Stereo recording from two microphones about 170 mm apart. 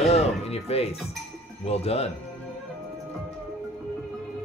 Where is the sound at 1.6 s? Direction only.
35° left (ahead or behind).